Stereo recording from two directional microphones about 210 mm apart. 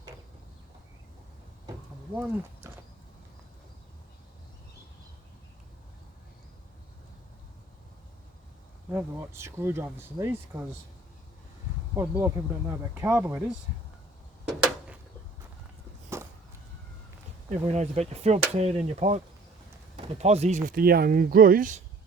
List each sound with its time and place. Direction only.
2.1 s speech: 10° right (ahead or behind)
8.9 s speech: 10° right (ahead or behind)
11.9 s speech: 10° right (ahead or behind)
16.1 s a sound: 10° right (ahead or behind)
17.5 s speech: 30° right (ahead or behind)